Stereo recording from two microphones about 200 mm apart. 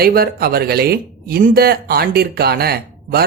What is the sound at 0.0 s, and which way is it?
Speech, 50° right (ahead or behind).